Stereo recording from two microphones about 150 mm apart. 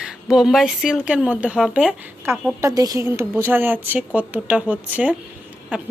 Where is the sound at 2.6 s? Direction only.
25° right (ahead or behind); by 5.9 s 10° right (ahead or behind).